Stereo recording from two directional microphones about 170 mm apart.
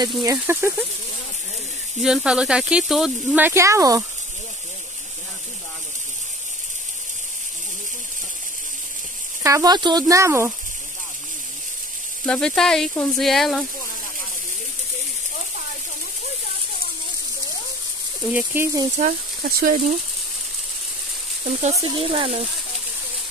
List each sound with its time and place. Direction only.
0.2 s speech: 15° right (ahead or behind)
2.0 s speech: centre (ahead or behind)
3.4 s speech: 15° right (ahead or behind)
9.4 s speech: 20° right (ahead or behind)
12.3 s speech: 5° left (ahead or behind)
18.2 s speech: 10° right (ahead or behind)
18.9 s speech: 50° right (ahead or behind)
21.5 s speech: 45° right (ahead or behind)
21.7 s speech: 25° right (ahead or behind)